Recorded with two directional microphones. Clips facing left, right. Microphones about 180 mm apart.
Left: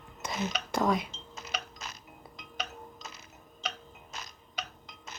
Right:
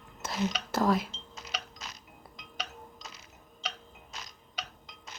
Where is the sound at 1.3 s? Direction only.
50° left (ahead or behind).